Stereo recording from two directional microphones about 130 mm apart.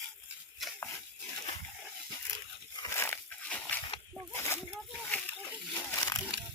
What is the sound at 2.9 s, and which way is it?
Dog, 15° left (ahead or behind).